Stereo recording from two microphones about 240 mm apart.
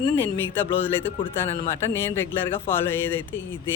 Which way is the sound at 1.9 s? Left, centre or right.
Centre.